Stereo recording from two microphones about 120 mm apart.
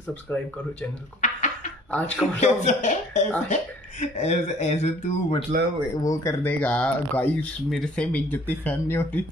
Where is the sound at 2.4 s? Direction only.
85° left; by 5.4 s 65° left (ahead or behind).